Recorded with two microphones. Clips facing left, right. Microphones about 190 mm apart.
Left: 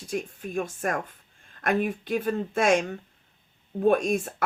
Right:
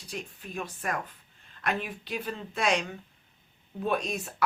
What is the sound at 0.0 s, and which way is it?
Speech, 45° left (ahead or behind).